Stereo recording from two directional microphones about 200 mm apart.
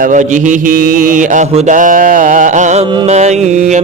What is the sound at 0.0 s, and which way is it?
Mantra, 40° right (ahead or behind).